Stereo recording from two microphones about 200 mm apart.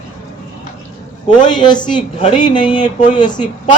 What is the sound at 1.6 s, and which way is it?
Speech, 20° left (ahead or behind).